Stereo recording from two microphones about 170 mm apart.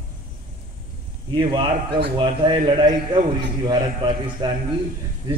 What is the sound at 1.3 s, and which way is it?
A man's voice, 30° right (ahead or behind).